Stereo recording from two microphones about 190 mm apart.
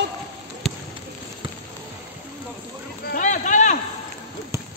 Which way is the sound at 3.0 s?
40° left (ahead or behind).